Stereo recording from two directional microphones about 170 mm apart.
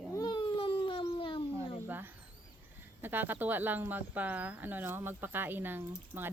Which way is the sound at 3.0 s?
10° right (ahead or behind).